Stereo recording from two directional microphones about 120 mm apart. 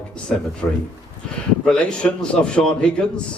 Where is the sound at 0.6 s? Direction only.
15° left (ahead or behind).